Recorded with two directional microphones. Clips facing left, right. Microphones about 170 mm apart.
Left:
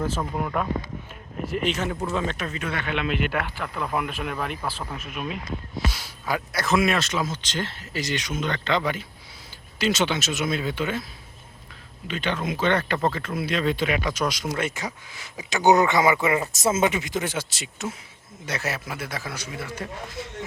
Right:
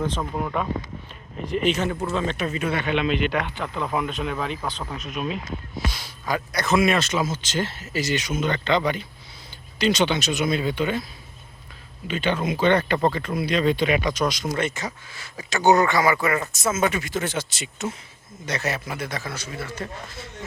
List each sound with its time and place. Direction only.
0.0 s speech: 5° left (ahead or behind)
2.5 s speech: 10° right (ahead or behind)
2.9 s speech: 5° left (ahead or behind)
12.0 s speech: centre (ahead or behind); by 16.5 s 15° left (ahead or behind)
16.5 s speech: 30° left (ahead or behind)
16.8 s a man's voice: 20° left (ahead or behind)